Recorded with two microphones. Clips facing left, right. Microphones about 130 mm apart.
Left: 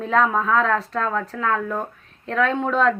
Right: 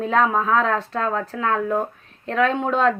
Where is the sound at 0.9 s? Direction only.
35° right (ahead or behind).